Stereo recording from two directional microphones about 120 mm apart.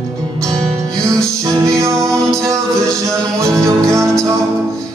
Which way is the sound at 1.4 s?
25° right (ahead or behind).